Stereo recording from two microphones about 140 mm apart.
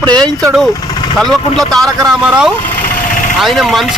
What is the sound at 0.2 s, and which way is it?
Speech, 25° right (ahead or behind).